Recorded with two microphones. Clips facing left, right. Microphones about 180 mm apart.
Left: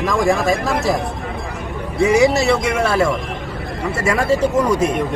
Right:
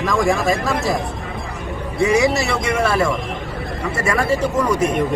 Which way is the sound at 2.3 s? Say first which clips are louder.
Left 3 dB; 10° left (ahead or behind).